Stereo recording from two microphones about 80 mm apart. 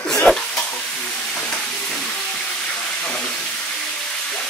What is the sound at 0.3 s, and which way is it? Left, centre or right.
Stir, centre.